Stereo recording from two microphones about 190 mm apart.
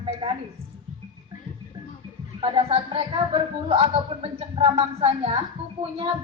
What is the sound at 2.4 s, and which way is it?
A woman's voice, 30° right (ahead or behind).